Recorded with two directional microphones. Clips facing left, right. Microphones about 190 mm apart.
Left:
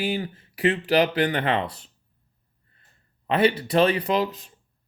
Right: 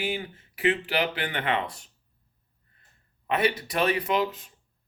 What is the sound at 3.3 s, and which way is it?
Speech, 30° left (ahead or behind).